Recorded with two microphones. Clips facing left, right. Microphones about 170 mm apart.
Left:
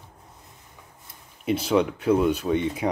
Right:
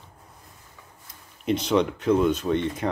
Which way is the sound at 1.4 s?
5° left (ahead or behind).